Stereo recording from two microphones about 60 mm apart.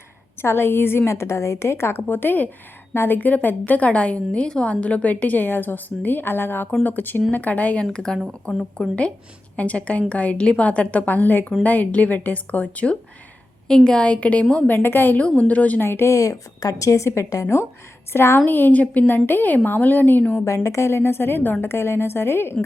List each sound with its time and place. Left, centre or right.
0.4 s a woman's voice: left
3.2 s a woman's voice: left
7.9 s a woman's voice: centre
14.7 s a woman's voice: left
15.4 s a woman's voice: left
15.8 s speech: left
16.1 s a woman's voice: left
17.4 s a woman's voice: left
20.7 s a woman's voice: left